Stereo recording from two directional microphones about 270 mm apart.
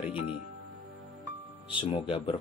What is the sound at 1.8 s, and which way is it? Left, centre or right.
Speech, centre.